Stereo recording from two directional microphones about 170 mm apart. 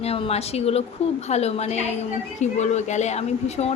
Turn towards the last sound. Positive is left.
turn(degrees=40)  # may be behind; listen again after turning